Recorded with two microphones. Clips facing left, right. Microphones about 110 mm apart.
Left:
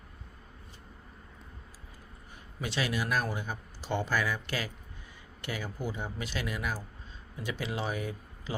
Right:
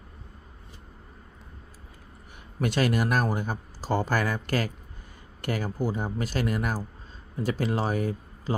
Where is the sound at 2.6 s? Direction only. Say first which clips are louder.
Right 8 dB; 50° right (ahead or behind).